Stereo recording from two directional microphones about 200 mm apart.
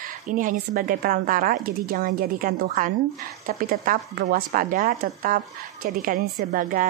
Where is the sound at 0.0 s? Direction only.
40° right (ahead or behind).